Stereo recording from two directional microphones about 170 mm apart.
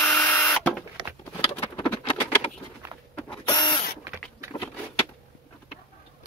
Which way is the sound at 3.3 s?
25° left (ahead or behind).